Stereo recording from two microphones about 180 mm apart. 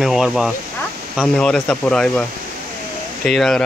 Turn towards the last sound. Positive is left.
turn(degrees=5)  # may be behind; listen again after turning